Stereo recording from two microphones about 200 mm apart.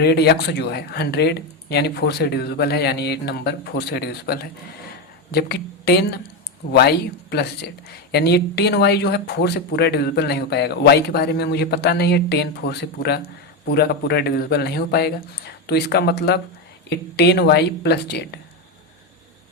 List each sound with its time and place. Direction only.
0.0 s speech: 55° left (ahead or behind)